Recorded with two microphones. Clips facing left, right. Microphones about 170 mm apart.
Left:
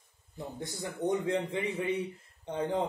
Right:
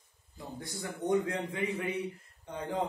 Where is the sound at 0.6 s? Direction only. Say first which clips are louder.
Left 2 dB; 25° left (ahead or behind).